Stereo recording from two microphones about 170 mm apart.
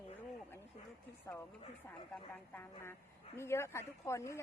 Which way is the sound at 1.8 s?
10° left (ahead or behind).